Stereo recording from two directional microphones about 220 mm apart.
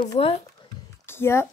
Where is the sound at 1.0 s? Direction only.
10° left (ahead or behind).